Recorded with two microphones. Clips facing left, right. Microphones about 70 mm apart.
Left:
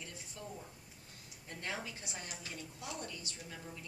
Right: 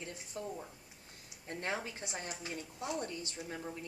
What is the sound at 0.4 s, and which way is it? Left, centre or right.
A woman's voice, right.